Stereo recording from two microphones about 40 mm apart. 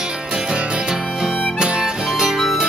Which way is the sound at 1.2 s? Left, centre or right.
Right.